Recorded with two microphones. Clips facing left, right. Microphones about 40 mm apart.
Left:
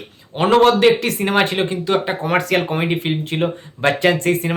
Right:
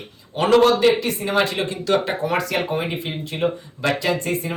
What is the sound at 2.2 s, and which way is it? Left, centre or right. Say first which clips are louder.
Speech: left 4 dB; left.